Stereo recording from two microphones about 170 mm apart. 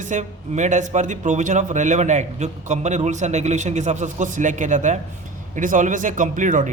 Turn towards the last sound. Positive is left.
turn(degrees=-50)  # may be behind; listen again after turning